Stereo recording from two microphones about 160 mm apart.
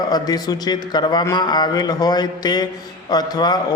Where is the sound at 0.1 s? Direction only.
25° left (ahead or behind).